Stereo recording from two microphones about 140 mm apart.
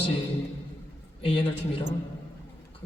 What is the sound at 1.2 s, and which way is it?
Speech, 40° left (ahead or behind).